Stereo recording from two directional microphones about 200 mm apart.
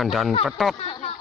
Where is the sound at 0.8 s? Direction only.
25° left (ahead or behind).